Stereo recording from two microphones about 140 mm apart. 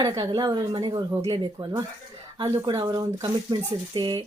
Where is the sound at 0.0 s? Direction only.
30° right (ahead or behind).